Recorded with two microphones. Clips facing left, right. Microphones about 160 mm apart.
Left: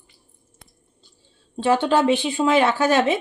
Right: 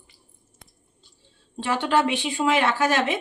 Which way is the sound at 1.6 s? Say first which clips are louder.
Left 4 dB; 30° left (ahead or behind).